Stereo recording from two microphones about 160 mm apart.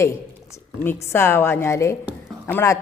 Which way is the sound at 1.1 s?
15° left (ahead or behind).